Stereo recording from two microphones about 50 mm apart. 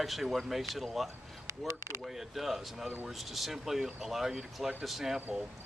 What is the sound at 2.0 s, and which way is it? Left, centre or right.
Speech, centre.